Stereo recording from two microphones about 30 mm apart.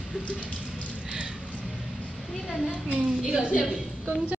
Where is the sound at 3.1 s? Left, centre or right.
Centre.